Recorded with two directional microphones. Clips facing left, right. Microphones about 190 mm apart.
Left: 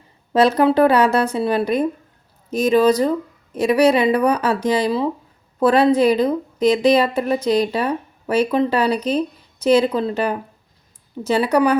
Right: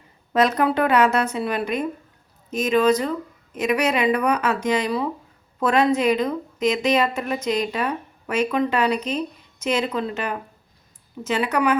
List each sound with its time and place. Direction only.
0.3 s speech: 30° left (ahead or behind)